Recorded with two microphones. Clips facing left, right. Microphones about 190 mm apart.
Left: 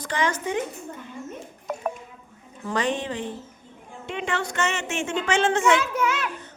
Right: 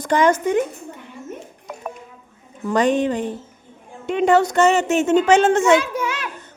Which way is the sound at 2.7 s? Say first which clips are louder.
Right 8 dB; 45° right (ahead or behind).